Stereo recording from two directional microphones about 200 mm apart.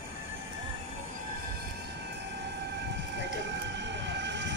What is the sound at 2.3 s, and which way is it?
Train, 60° right (ahead or behind).